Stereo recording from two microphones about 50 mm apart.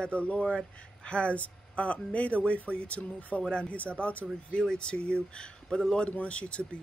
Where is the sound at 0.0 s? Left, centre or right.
Left.